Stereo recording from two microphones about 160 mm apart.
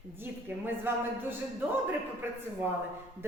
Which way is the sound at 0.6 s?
15° right (ahead or behind).